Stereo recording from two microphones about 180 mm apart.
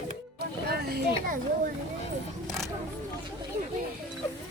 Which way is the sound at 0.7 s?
60° right (ahead or behind).